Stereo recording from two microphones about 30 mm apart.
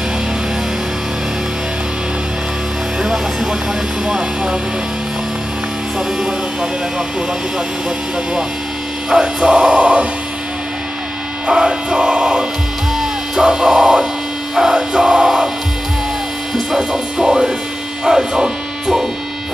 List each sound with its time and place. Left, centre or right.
3.0 s music: centre
4.0 s speech: right
9.1 s music: right
11.4 s music: right
12.9 s music: centre
16.7 s speech: centre